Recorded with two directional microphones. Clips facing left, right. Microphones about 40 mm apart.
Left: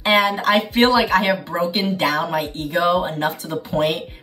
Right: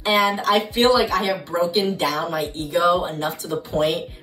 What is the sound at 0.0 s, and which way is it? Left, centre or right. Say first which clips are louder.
Speech: left 2 dB; left.